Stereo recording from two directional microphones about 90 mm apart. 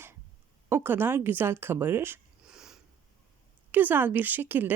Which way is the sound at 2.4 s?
5° right (ahead or behind).